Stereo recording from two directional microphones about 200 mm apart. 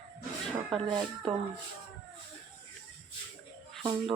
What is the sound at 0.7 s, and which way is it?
Speech, 25° right (ahead or behind).